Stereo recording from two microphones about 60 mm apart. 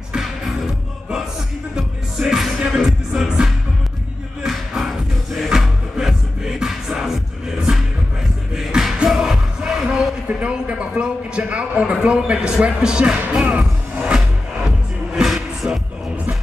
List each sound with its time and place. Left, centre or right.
0.1 s music: centre
10.2 s a man's voice: centre
13.3 s music: centre
15.1 s music: centre